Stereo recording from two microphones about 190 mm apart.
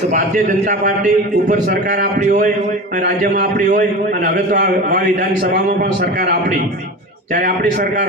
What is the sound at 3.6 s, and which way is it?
Speech, 40° right (ahead or behind).